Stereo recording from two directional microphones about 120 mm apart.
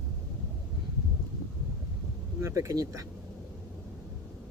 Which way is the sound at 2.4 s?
25° right (ahead or behind).